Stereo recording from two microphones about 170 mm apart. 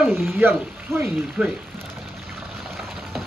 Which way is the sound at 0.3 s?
15° right (ahead or behind).